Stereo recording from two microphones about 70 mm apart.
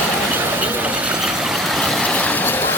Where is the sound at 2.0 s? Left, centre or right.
Centre.